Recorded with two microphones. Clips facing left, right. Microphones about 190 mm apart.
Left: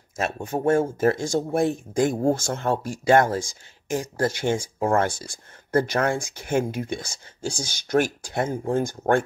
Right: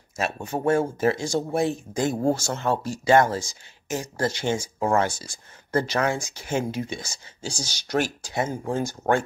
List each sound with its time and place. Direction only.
0.2 s speech: 50° left (ahead or behind)
4.7 s speech: 50° left (ahead or behind)